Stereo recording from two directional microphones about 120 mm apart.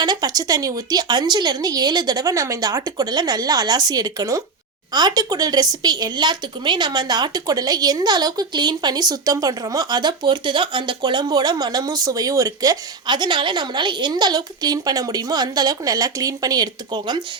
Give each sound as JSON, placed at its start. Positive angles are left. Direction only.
{"t": 0.0, "sound": "speech", "side_deg": -35}